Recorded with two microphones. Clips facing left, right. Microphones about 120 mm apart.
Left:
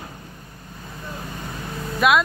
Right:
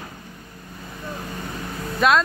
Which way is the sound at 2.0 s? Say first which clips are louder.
Even; 5° left (ahead or behind).